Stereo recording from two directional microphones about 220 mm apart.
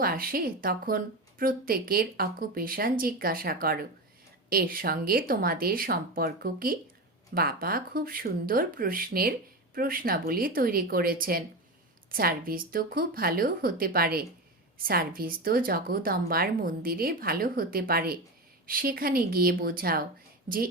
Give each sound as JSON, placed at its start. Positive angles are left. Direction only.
{"t": 0.0, "sound": "speech", "side_deg": -40}